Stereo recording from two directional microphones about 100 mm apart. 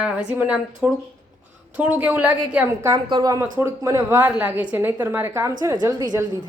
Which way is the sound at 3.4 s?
25° right (ahead or behind).